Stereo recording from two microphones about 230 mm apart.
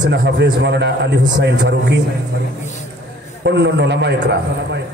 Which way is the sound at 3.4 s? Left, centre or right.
Right.